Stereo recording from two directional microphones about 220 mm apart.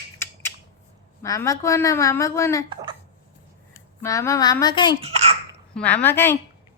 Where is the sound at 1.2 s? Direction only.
15° left (ahead or behind).